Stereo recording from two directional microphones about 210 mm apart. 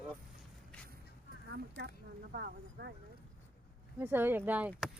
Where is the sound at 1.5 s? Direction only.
50° right (ahead or behind).